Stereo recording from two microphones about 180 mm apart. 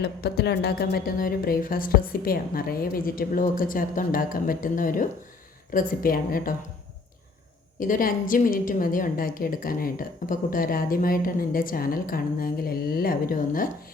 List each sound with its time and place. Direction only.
0.0 s a woman's voice: 65° left (ahead or behind)
7.8 s a woman's voice: 50° left (ahead or behind)